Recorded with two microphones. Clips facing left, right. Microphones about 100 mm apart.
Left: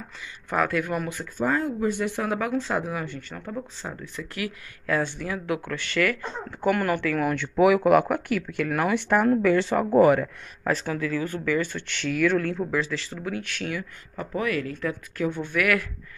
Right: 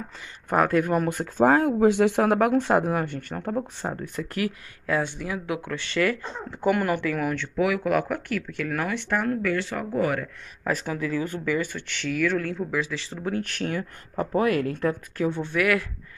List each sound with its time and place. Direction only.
0.5 s speech: 35° right (ahead or behind)
1.0 s speech: 55° right (ahead or behind)
3.3 s speech: 40° right (ahead or behind)
4.0 s speech: 45° right (ahead or behind)
4.8 s speech: 15° right (ahead or behind)
7.5 s speech: 20° left (ahead or behind)
10.7 s speech: 10° right (ahead or behind)
13.1 s speech: 35° right (ahead or behind)
15.1 s speech: 30° right (ahead or behind)